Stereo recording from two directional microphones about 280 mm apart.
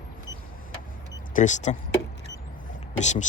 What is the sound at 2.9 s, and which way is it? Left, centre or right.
Speech, left.